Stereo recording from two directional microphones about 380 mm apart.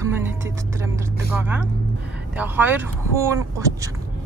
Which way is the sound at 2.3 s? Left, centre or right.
Centre.